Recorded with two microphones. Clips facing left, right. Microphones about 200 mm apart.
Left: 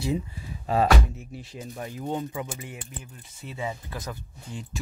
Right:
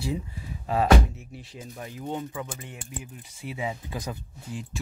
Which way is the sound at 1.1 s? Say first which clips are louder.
Left 3 dB; 40° left (ahead or behind).